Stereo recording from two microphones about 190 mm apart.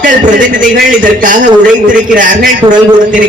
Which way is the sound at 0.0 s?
45° right (ahead or behind).